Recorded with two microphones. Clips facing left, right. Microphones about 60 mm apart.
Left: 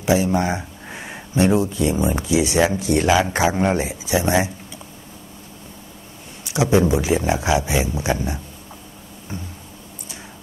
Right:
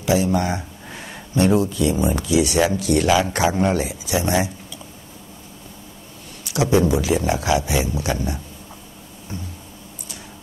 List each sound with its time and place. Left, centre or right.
0.0 s speech: left
6.4 s speech: left